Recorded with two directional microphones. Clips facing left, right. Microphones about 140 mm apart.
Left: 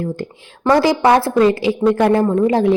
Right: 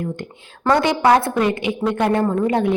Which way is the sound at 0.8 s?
30° left (ahead or behind).